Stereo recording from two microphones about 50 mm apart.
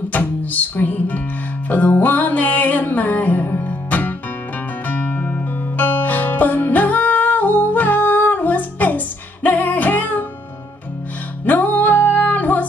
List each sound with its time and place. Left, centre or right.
0.1 s music: left
11.4 s music: left